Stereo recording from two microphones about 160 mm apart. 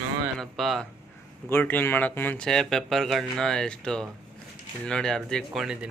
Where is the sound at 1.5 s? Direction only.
10° left (ahead or behind).